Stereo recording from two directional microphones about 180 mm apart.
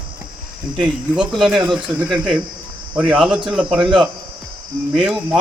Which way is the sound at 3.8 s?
25° right (ahead or behind).